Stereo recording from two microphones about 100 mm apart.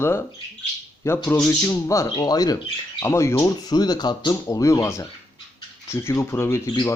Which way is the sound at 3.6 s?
40° left (ahead or behind).